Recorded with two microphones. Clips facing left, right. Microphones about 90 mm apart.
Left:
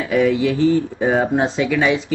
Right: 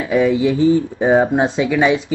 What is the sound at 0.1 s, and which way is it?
Speech, 20° right (ahead or behind).